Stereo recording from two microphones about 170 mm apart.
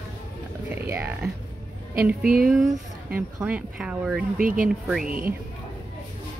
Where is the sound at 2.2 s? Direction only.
60° right (ahead or behind).